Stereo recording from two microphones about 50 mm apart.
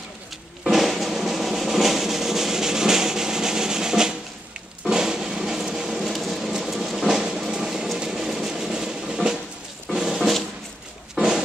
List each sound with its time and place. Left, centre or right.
0.7 s drum: centre
4.8 s a sound: centre
9.8 s music: centre
11.1 s pig: centre